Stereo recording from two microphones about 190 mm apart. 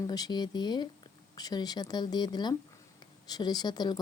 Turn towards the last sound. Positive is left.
turn(degrees=20)  # may be behind; listen again after turning